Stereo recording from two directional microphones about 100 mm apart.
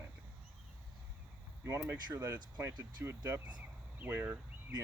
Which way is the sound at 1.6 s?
25° right (ahead or behind).